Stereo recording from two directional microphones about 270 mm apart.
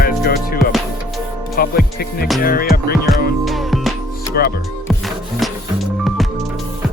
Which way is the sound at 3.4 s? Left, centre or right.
Centre.